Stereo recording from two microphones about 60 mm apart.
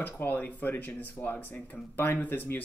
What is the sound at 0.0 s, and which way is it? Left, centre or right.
Speech, left.